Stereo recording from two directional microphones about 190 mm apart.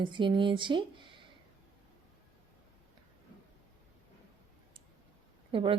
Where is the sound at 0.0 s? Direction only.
25° right (ahead or behind).